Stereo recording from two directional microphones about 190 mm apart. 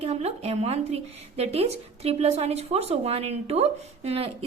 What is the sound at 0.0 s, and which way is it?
A woman's voice, 35° right (ahead or behind).